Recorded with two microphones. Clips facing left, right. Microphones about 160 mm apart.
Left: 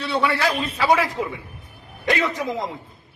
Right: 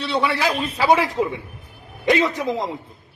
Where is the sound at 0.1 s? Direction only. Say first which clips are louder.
Even; 20° right (ahead or behind).